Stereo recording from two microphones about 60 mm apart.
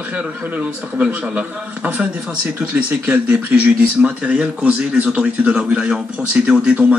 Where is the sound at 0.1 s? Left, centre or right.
Centre.